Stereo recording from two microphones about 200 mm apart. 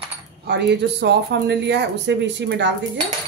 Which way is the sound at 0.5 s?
55° right (ahead or behind).